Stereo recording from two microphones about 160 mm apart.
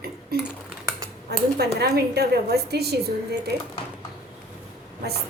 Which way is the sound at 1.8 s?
85° right.